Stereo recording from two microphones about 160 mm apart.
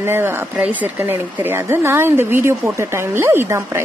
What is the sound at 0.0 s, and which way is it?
A woman's voice, 15° right (ahead or behind).